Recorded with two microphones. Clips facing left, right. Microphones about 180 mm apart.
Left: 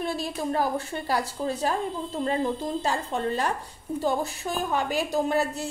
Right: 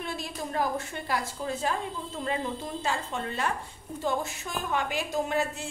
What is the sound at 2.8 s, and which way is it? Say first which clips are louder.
A woman's voice: left 4 dB; 35° left (ahead or behind).